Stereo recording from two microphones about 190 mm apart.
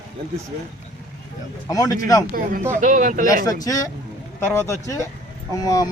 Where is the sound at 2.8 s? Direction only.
40° right (ahead or behind).